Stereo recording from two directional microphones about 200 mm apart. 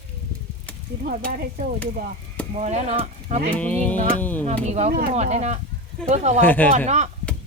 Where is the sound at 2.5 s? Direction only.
35° right (ahead or behind).